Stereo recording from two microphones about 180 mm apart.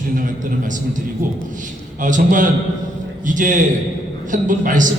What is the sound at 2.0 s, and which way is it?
A man's voice, 45° right (ahead or behind).